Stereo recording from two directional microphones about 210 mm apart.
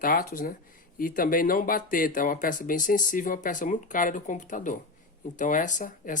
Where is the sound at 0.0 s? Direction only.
45° left (ahead or behind).